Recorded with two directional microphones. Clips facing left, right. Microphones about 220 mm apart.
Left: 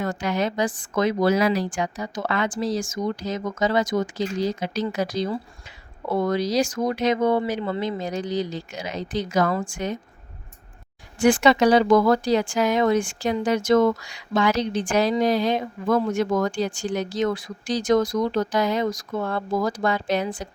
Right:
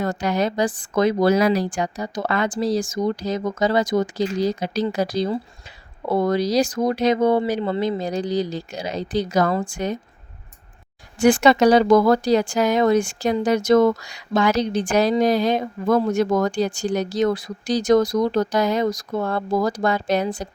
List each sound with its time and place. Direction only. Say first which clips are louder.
0.0 s a woman's voice: right 3 dB; 40° right (ahead or behind)
11.2 s a woman's voice: right 2 dB; 45° right (ahead or behind)